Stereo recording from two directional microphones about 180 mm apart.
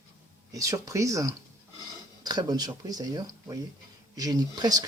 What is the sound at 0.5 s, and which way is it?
Speech, 20° right (ahead or behind).